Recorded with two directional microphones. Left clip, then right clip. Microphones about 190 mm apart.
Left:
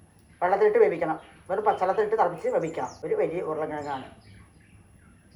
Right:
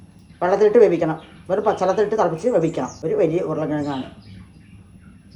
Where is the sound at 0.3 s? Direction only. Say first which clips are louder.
Right 6 dB; 70° right (ahead or behind); by 1.7 s 90° right.